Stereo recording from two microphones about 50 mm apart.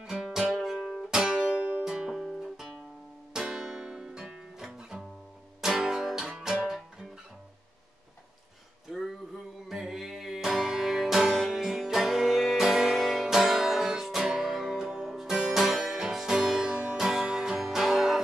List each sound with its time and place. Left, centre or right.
0.0 s music: centre
1.4 s music: right
1.9 s music: centre
8.9 s a sound: centre
9.7 s music: centre